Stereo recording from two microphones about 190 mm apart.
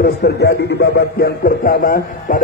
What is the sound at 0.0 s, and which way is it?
A man's voice, 60° left (ahead or behind).